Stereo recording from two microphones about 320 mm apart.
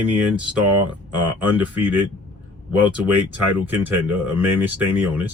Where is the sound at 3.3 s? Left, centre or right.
Centre.